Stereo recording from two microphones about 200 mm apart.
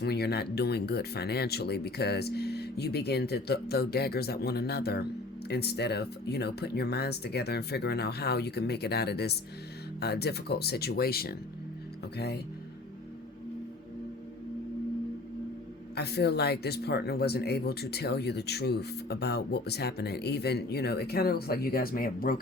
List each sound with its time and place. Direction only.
0.0 s speech: 55° left (ahead or behind)
16.0 s speech: 55° left (ahead or behind)